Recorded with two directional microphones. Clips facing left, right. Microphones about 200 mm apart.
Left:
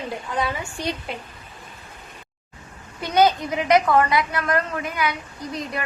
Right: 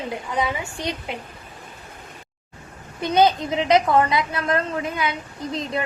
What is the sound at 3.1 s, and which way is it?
A woman's voice, 20° right (ahead or behind).